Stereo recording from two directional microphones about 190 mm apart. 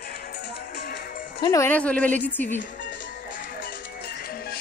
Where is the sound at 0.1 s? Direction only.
50° left (ahead or behind).